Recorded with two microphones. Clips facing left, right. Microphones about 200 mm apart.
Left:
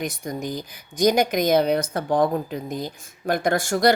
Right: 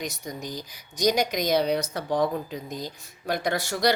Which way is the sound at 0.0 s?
55° left (ahead or behind).